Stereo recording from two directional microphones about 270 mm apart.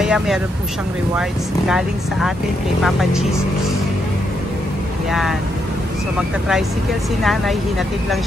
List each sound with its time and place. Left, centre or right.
0.0 s speech: centre
1.7 s speech: centre